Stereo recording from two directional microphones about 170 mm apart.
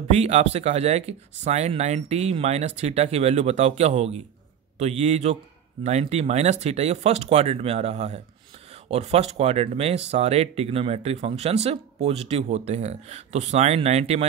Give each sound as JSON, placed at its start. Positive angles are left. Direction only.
{"t": 0.1, "sound": "speech", "side_deg": -40}